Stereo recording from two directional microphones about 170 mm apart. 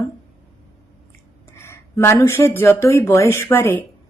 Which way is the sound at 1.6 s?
15° left (ahead or behind).